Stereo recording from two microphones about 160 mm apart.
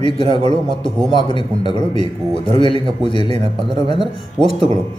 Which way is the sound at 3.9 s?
Centre (ahead or behind).